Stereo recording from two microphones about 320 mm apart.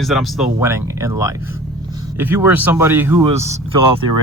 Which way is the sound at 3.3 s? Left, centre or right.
Centre.